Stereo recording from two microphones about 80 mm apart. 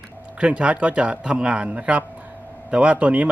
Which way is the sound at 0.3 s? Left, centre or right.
Centre.